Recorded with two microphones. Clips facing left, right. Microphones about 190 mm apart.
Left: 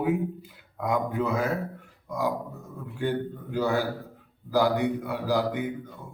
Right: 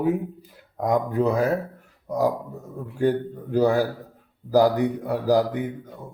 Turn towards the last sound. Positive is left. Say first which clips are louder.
# right 5 dB
turn(degrees=-40)  # may be behind; listen again after turning